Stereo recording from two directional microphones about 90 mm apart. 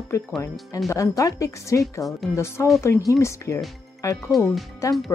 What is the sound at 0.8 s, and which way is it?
Speech, 35° left (ahead or behind).